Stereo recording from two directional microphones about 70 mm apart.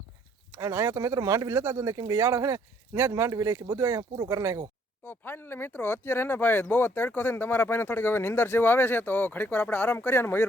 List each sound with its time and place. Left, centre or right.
0.5 s speech: right
5.0 s speech: left